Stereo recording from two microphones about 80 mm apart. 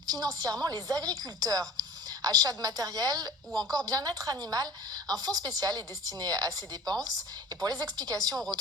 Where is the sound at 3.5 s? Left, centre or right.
Centre.